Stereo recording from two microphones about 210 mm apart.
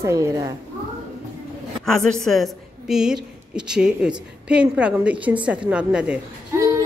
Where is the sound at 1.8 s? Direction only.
Centre (ahead or behind).